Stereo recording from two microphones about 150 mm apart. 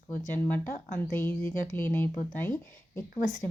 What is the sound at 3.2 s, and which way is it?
Speech, 25° left (ahead or behind).